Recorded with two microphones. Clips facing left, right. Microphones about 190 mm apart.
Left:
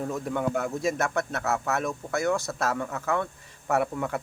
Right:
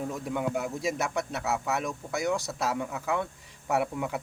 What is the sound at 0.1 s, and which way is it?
Speech, 10° right (ahead or behind).